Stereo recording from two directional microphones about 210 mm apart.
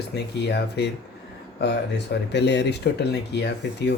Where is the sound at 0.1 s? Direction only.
50° left (ahead or behind).